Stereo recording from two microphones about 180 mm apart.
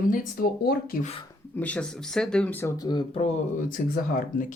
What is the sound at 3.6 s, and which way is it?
Speech, 50° left (ahead or behind).